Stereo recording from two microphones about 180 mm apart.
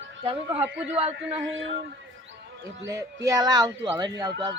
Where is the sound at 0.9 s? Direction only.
35° right (ahead or behind).